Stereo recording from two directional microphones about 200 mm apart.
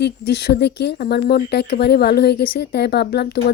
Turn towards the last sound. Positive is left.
turn(degrees=55)  # may be behind; listen again after turning